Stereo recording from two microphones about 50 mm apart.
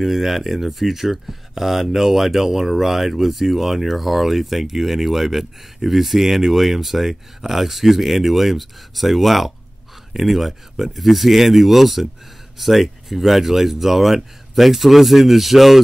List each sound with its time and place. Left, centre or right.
0.0 s speech: centre